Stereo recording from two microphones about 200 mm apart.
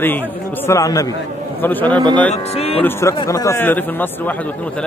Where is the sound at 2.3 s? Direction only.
30° left (ahead or behind).